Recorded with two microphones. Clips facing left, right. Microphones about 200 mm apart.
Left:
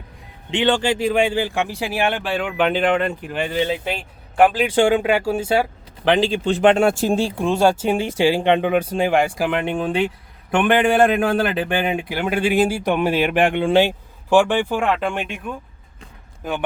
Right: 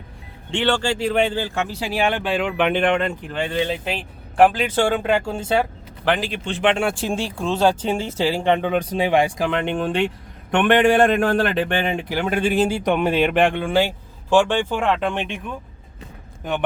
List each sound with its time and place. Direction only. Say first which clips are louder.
0.5 s a man's voice: left 2 dB; 15° left (ahead or behind)
4.7 s a man's voice: left 3 dB; 15° left (ahead or behind)
6.1 s speech: left 5 dB; 30° left (ahead or behind)
7.3 s a man's voice: left 2 dB; 15° left (ahead or behind)